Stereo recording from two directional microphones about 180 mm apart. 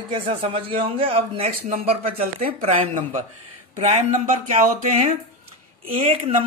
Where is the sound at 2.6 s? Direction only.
35° right (ahead or behind).